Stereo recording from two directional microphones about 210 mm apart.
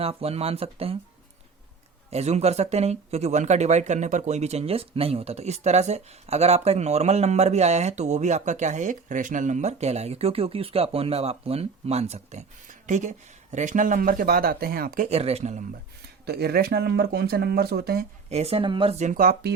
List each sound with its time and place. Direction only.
0.0 s speech: 30° right (ahead or behind)
2.0 s speech: 30° right (ahead or behind)
16.2 s speech: 50° right (ahead or behind)
18.3 s speech: 30° right (ahead or behind); by 19.5 s 50° right (ahead or behind)